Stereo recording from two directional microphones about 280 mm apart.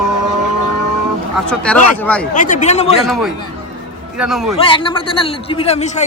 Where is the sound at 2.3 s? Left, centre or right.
Left.